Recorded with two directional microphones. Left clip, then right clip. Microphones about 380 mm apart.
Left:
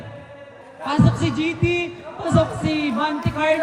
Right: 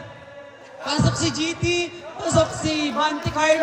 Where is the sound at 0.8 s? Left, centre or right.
Centre.